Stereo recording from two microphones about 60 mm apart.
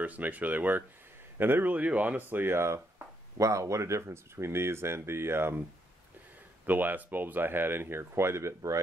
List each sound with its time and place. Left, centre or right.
0.0 s speech: right
3.3 s speech: right